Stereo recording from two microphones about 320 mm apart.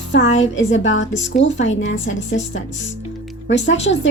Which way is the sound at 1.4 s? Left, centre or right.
Left.